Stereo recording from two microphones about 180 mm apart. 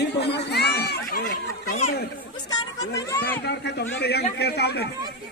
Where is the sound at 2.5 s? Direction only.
20° left (ahead or behind).